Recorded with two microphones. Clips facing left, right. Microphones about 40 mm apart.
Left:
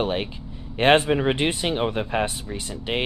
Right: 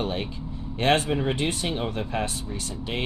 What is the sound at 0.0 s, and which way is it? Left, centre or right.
Speech, left.